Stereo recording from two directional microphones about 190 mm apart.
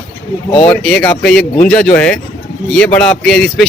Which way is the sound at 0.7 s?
5° left (ahead or behind).